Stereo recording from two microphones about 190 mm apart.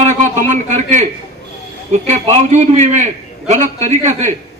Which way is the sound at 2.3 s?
35° right (ahead or behind).